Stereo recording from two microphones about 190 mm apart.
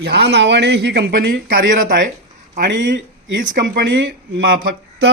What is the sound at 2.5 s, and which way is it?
Speech, 65° right (ahead or behind).